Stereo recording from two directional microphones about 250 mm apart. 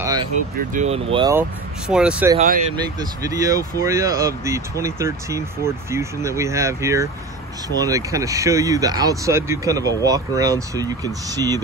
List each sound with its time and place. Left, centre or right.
0.0 s vehicle: centre
0.7 s speech: right
1.1 s speech: centre
1.9 s speech: centre
2.3 s speech: right
2.7 s speech: centre